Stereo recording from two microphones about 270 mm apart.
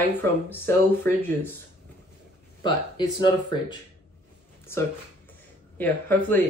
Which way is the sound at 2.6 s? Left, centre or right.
Centre.